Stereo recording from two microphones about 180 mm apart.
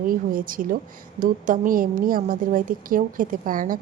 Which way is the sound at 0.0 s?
50° right (ahead or behind).